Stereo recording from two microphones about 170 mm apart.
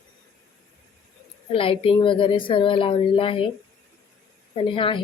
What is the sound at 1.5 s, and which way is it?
Speech, 30° left (ahead or behind).